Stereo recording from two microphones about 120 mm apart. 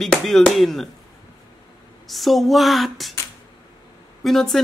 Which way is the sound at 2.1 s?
Centre (ahead or behind).